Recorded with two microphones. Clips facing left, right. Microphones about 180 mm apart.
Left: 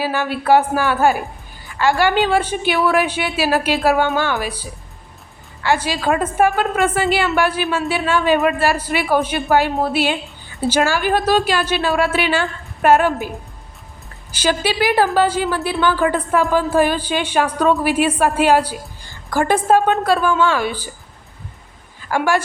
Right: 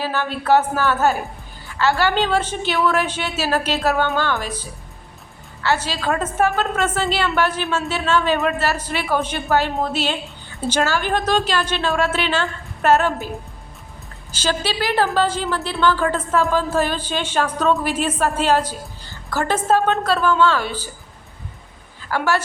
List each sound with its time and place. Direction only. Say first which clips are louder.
0.0 s a woman's voice: left 3 dB; 10° left (ahead or behind)
14.3 s a woman's voice: left 4 dB; 10° left (ahead or behind)
22.1 s a woman's voice: left 3 dB; 10° left (ahead or behind)